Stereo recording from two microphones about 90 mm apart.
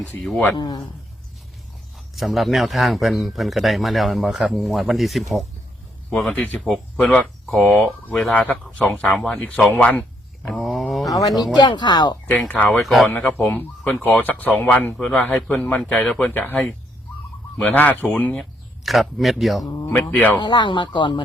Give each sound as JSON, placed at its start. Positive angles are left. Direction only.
{"t": 0.5, "sound": "speech", "side_deg": 55}
{"t": 2.1, "sound": "a man's voice", "side_deg": 0}
{"t": 10.5, "sound": "a sound", "side_deg": 0}
{"t": 11.3, "sound": "speech", "side_deg": 0}
{"t": 11.5, "sound": "speech", "side_deg": 55}
{"t": 12.3, "sound": "a man's voice", "side_deg": 15}
{"t": 12.8, "sound": "speech", "side_deg": 0}
{"t": 13.1, "sound": "a man's voice", "side_deg": 20}
{"t": 17.6, "sound": "a man's voice", "side_deg": 15}
{"t": 18.8, "sound": "speech", "side_deg": 0}
{"t": 19.9, "sound": "a man's voice", "side_deg": 15}
{"t": 20.3, "sound": "speech", "side_deg": 55}